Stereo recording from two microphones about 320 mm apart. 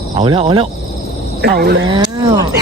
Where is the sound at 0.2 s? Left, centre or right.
Centre.